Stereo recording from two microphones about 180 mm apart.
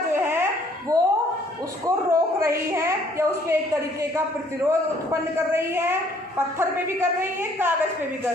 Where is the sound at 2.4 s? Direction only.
15° right (ahead or behind).